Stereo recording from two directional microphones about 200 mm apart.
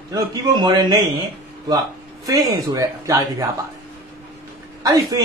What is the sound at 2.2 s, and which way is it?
A man's voice, 15° right (ahead or behind).